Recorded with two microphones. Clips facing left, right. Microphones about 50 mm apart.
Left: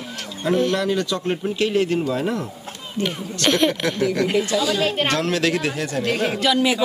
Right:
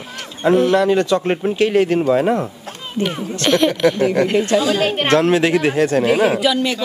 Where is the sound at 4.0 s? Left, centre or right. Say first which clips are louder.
Right 4 dB; right.